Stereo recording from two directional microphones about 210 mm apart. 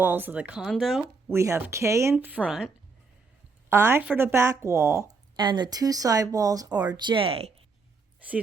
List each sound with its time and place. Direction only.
0.0 s speech: 10° right (ahead or behind)
1.3 s speech: 10° right (ahead or behind)
3.7 s speech: 10° right (ahead or behind); by 7.5 s 25° right (ahead or behind)